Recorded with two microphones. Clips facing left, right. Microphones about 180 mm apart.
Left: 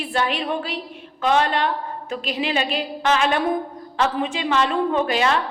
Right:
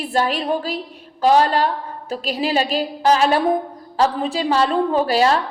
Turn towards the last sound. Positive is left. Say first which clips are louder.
# right 3 dB
turn(degrees=-35)  # may be behind; listen again after turning